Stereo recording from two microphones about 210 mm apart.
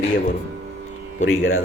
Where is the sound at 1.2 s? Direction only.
70° left (ahead or behind).